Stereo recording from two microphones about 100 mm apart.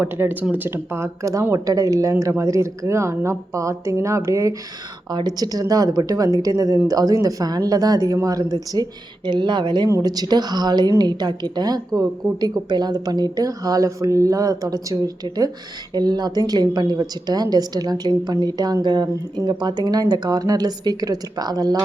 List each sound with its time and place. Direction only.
0.0 s a woman's voice: 20° right (ahead or behind); by 21.8 s 40° right (ahead or behind)